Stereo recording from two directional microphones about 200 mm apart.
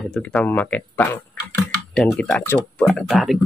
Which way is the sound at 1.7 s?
5° left (ahead or behind).